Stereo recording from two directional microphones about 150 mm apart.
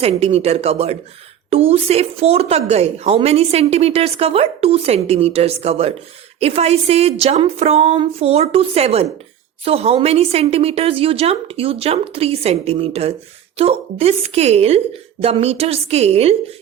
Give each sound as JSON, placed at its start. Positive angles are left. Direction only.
{"t": 0.0, "sound": "a woman's voice", "side_deg": -45}